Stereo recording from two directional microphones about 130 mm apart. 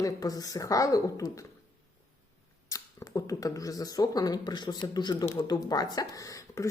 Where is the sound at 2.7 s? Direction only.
25° left (ahead or behind).